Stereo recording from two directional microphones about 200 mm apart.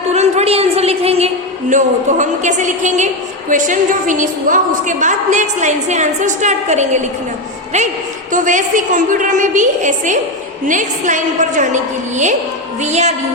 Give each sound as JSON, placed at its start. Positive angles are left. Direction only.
{"t": 0.1, "sound": "a sound", "side_deg": -35}
{"t": 1.7, "sound": "a woman's voice", "side_deg": -40}
{"t": 8.3, "sound": "a woman's voice", "side_deg": -40}